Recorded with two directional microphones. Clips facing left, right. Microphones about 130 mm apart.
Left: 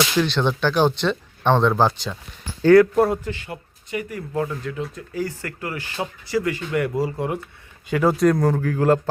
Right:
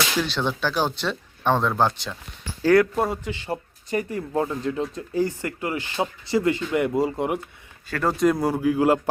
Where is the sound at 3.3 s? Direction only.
30° right (ahead or behind).